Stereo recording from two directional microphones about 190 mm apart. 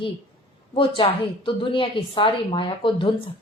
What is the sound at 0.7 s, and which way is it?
A woman's voice, 25° left (ahead or behind).